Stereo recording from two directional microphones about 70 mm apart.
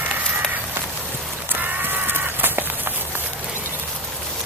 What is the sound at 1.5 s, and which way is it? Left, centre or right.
Livestock, right.